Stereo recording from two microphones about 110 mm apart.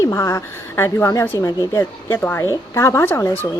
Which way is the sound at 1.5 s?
35° left (ahead or behind).